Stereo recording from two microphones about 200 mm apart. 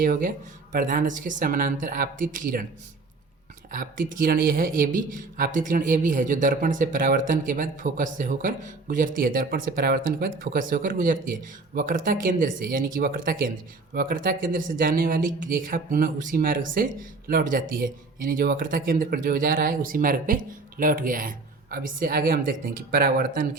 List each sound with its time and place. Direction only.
0.0 s speech: 45° right (ahead or behind)
3.7 s speech: 45° right (ahead or behind)